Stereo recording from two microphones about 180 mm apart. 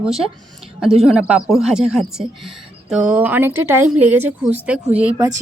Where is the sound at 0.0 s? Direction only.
Centre (ahead or behind).